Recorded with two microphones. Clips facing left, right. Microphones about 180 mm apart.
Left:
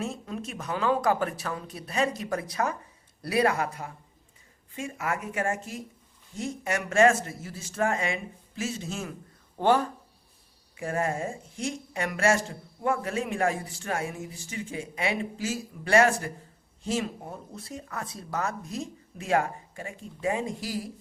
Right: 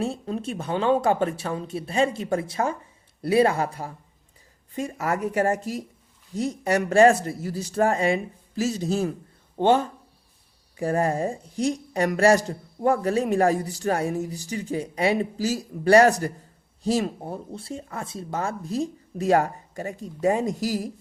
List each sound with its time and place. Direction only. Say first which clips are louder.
0.0 s a woman's voice: right 6 dB; 35° right (ahead or behind)
9.6 s speech: right 3 dB; 25° right (ahead or behind)
10.8 s a woman's voice: right 6 dB; 35° right (ahead or behind)